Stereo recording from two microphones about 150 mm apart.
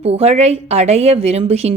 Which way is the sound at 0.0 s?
45° right (ahead or behind).